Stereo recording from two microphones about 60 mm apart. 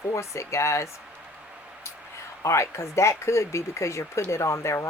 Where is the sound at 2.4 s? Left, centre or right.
Left.